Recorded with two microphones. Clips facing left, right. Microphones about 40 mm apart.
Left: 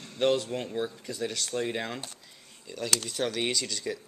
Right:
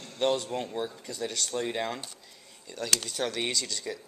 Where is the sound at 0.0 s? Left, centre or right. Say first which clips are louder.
Left 2 dB; centre.